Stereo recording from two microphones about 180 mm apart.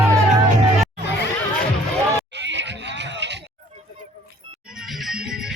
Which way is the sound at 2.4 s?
80° right.